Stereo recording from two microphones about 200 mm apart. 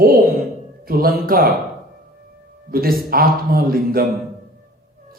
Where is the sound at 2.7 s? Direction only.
50° right (ahead or behind).